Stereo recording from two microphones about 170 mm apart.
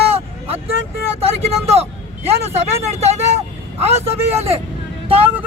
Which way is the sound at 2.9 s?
40° right (ahead or behind).